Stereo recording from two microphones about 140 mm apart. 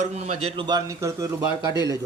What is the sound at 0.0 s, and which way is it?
A man's voice, 50° right (ahead or behind).